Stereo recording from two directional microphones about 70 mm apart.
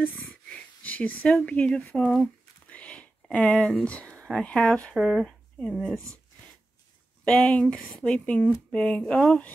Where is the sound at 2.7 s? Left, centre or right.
Centre.